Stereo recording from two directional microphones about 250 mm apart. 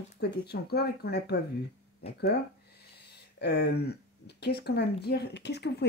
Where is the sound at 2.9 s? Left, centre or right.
Left.